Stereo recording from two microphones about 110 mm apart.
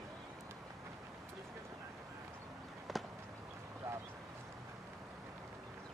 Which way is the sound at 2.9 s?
Centre (ahead or behind).